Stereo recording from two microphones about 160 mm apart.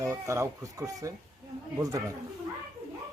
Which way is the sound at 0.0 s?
20° right (ahead or behind).